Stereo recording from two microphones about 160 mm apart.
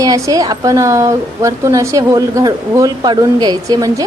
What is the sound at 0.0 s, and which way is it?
Speech, 25° right (ahead or behind).